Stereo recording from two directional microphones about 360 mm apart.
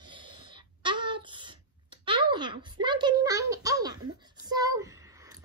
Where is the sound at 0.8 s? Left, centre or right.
Centre.